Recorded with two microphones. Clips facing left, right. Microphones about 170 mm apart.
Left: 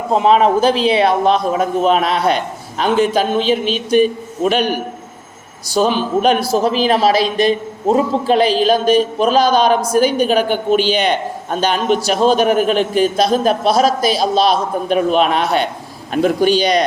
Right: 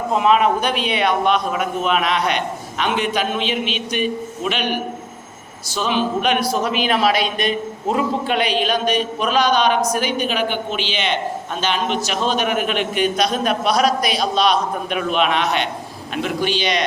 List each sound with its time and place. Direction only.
0.1 s a woman's voice: 30° left (ahead or behind)